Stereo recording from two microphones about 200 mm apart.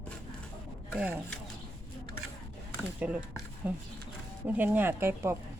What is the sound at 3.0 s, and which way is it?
Speech, 5° right (ahead or behind).